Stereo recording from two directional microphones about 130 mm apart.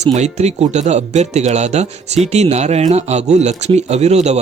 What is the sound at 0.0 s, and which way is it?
Speech, 60° right (ahead or behind).